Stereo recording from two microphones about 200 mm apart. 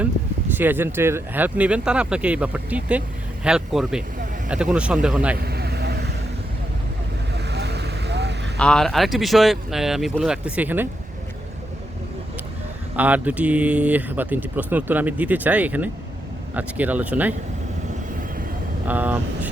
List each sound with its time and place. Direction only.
0.5 s speech: 10° right (ahead or behind)
5.4 s vehicle: 55° right (ahead or behind)
7.3 s vehicle: 55° right (ahead or behind)
8.5 s speech: 5° left (ahead or behind)
13.0 s speech: 10° right (ahead or behind)
18.9 s speech: 10° right (ahead or behind)